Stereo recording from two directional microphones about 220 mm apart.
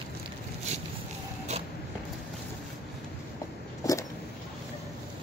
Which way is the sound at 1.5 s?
30° right (ahead or behind).